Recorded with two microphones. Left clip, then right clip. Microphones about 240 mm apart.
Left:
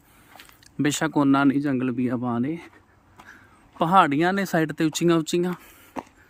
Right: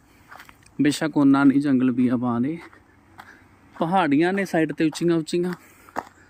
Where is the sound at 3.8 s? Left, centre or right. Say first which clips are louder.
Left 2 dB; left.